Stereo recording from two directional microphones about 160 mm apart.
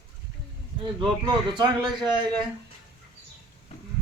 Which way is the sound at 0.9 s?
25° right (ahead or behind).